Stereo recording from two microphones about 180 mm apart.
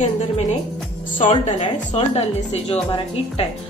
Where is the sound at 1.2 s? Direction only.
35° left (ahead or behind).